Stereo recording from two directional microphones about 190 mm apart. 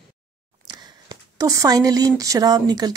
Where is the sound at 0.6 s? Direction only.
20° right (ahead or behind).